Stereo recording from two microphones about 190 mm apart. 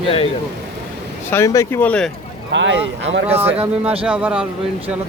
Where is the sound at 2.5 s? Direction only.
70° right (ahead or behind).